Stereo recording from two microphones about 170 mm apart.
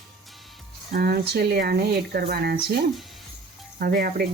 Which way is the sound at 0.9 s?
60° right (ahead or behind).